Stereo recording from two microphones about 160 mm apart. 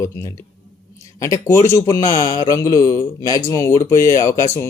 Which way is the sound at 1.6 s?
20° left (ahead or behind).